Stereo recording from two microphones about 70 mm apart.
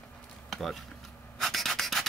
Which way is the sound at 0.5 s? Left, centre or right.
Centre.